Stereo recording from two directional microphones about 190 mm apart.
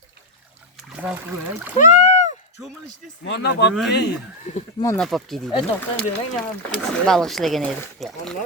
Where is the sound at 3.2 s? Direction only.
65° left (ahead or behind).